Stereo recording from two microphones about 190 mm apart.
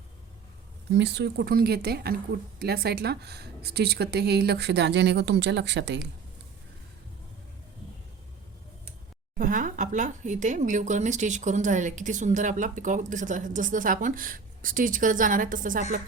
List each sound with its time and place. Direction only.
0.9 s speech: 65° right (ahead or behind)
9.4 s speech: 45° right (ahead or behind)